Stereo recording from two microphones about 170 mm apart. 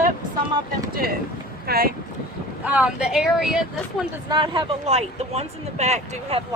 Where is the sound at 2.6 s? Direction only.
10° right (ahead or behind).